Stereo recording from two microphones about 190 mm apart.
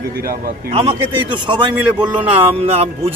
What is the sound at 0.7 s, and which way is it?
A man's voice, 30° right (ahead or behind).